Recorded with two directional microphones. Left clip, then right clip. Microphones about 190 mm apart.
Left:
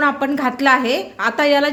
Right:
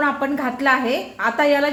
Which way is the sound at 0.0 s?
30° left (ahead or behind).